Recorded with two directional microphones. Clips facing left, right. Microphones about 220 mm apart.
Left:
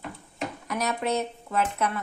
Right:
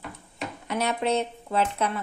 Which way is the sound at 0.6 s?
30° right (ahead or behind).